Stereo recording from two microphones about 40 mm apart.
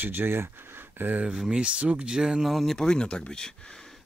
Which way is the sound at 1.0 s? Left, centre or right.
Right.